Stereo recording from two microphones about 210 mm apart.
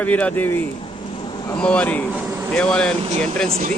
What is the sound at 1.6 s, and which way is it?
Speech, 5° left (ahead or behind).